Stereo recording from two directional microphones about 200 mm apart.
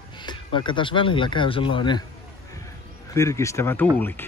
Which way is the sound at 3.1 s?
15° left (ahead or behind).